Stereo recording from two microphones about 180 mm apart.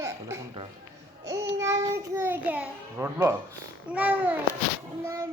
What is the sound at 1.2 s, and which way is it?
A child's voice, 15° right (ahead or behind).